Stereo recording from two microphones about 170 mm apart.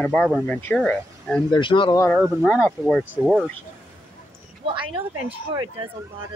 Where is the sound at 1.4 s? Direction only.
30° left (ahead or behind).